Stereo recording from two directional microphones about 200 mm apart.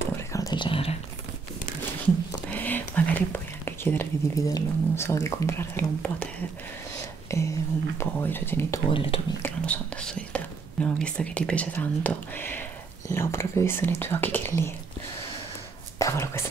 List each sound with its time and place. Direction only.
0.3 s whispering: 20° left (ahead or behind)
2.5 s speech: 10° left (ahead or behind)
7.3 s a sound: 15° left (ahead or behind)
8.0 s speech: 10° left (ahead or behind)
8.8 s speech: 25° left (ahead or behind)
9.4 s speech: 5° left (ahead or behind)
16.0 s speech: 15° left (ahead or behind)